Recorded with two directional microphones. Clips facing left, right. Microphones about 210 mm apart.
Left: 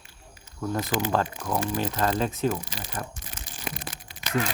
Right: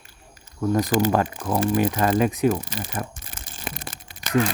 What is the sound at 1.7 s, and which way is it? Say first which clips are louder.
Speech: right 7 dB; 10° right (ahead or behind).